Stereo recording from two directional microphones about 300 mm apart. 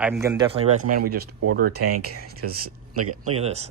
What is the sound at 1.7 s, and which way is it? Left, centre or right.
Speech, right.